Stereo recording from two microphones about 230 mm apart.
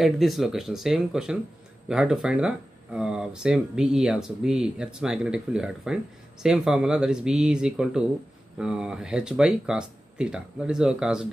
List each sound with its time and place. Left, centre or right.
0.0 s speech: centre